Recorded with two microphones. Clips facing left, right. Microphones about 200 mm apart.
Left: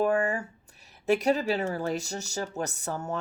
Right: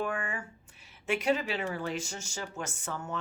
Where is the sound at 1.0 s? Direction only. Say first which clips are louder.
Left 5 dB; 40° left (ahead or behind).